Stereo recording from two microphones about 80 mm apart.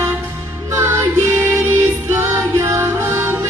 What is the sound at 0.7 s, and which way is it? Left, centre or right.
Music, right.